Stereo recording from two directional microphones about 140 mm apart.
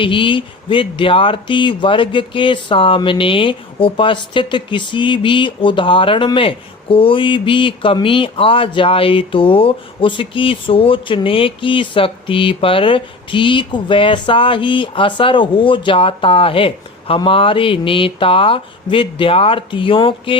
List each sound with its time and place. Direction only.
0.0 s speech: 35° left (ahead or behind)